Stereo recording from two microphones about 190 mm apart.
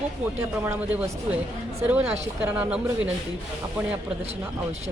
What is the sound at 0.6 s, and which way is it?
Speech, 10° right (ahead or behind).